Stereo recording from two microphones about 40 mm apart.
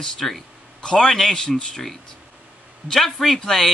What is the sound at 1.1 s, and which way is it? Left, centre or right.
Speech, centre.